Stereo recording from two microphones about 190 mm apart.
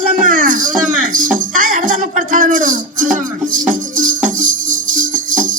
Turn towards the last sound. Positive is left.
turn(degrees=-45)  # may be behind; listen again after turning